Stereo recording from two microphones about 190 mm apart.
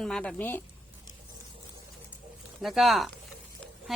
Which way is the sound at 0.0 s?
5° left (ahead or behind).